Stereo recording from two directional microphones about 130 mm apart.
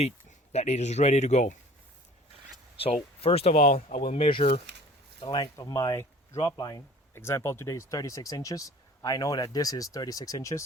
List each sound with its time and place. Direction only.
0.5 s speech: 60° left (ahead or behind)
2.7 s speech: 50° left (ahead or behind)
3.5 s speech: 90° left; by 4.6 s 45° left (ahead or behind)
5.2 s speech: 30° left (ahead or behind)
7.1 s speech: 20° left (ahead or behind)